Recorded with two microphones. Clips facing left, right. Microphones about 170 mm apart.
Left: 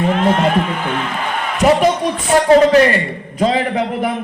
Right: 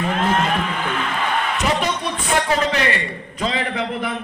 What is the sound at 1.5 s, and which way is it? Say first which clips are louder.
A man's voice: left 9 dB; 40° left (ahead or behind).